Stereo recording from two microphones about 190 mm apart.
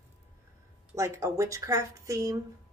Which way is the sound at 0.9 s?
15° right (ahead or behind).